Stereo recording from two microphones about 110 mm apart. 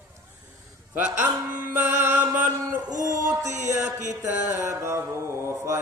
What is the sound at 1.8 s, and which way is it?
Mantra, 15° right (ahead or behind).